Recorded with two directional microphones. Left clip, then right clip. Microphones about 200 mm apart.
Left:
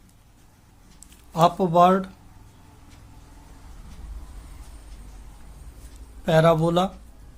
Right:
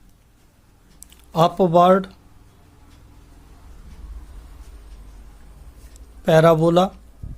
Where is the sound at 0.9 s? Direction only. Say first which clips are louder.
Right 3 dB; 35° right (ahead or behind).